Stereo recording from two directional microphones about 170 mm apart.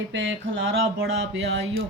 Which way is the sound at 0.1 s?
90° right.